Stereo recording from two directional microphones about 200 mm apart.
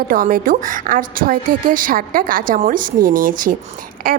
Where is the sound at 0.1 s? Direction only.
45° right (ahead or behind).